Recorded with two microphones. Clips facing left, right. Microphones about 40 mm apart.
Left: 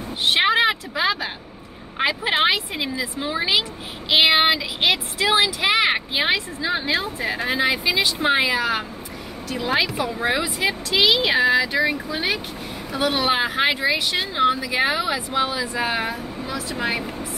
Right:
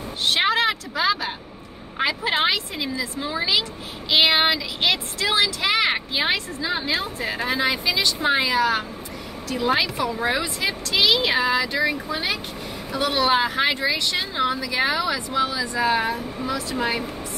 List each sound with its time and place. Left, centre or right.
0.2 s a sound: centre
2.0 s a woman's voice: left
4.1 s speech: centre
8.5 s speech: centre
16.3 s speech: centre
16.8 s speech: centre